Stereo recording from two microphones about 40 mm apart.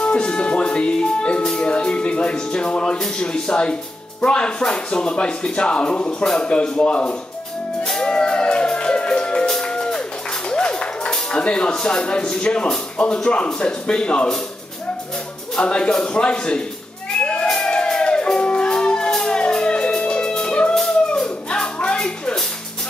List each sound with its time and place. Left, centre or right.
0.0 s speech: left
7.8 s music: centre
11.3 s speech: left
15.5 s speech: left
17.2 s music: left
21.5 s a sound: left